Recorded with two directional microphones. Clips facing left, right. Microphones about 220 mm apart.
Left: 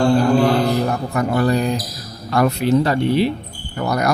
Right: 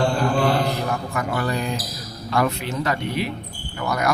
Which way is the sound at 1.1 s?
35° left (ahead or behind).